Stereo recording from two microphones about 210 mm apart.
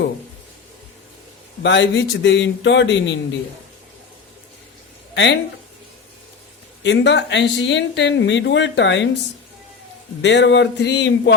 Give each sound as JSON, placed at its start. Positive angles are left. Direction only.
{"t": 1.6, "sound": "speech", "side_deg": 60}
{"t": 5.1, "sound": "speech", "side_deg": 55}
{"t": 6.8, "sound": "speech", "side_deg": 55}
{"t": 10.2, "sound": "speech", "side_deg": 55}